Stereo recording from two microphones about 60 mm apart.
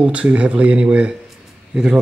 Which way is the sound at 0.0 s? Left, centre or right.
Centre.